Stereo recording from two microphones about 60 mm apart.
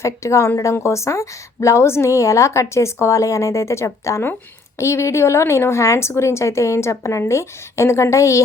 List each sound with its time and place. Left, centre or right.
0.0 s a woman's voice: left